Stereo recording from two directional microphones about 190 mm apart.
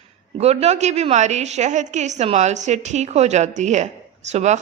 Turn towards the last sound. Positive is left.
turn(degrees=-35)  # may be behind; listen again after turning